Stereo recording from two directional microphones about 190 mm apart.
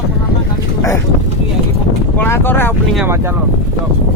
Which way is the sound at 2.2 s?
10° left (ahead or behind).